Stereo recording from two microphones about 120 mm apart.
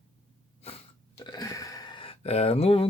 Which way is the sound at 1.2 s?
30° left (ahead or behind).